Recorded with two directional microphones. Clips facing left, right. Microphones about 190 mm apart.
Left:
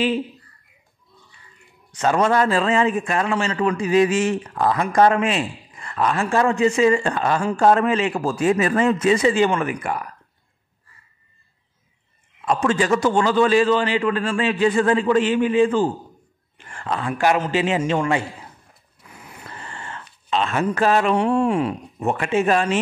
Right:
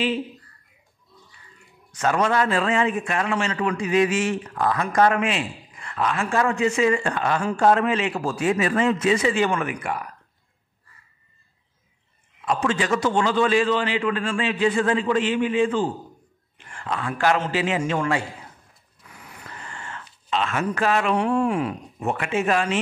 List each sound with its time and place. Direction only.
2.0 s a man's voice: 30° left (ahead or behind)
12.4 s a man's voice: 45° left (ahead or behind)
16.7 s a sound: 40° left (ahead or behind)
17.5 s a man's voice: 25° left (ahead or behind)
19.1 s a sound: 25° left (ahead or behind)
20.2 s a man's voice: 35° left (ahead or behind)